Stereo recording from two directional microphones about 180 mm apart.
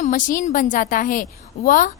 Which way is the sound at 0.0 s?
45° left (ahead or behind).